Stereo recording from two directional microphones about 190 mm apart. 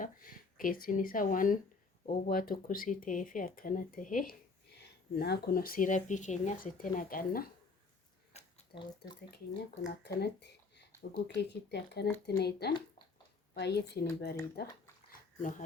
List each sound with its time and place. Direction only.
0.0 s speech: 45° left (ahead or behind)
8.3 s a sound: 35° left (ahead or behind)
9.8 s speech: 65° left (ahead or behind)
15.4 s speech: 45° left (ahead or behind)